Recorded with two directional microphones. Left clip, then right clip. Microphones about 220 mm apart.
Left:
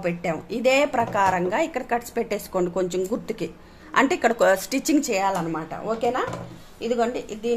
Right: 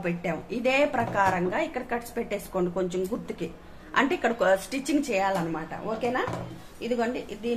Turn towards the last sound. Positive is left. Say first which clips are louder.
# left 5 dB
turn(degrees=35)  # may be behind; listen again after turning